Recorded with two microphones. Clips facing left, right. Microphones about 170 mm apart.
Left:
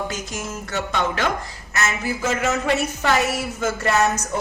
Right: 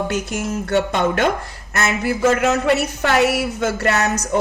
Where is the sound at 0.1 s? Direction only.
60° right (ahead or behind).